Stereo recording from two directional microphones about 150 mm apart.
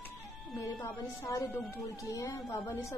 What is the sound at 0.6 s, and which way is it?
Speech, 20° left (ahead or behind).